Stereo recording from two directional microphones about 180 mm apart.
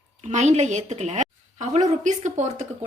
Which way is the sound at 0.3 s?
40° right (ahead or behind).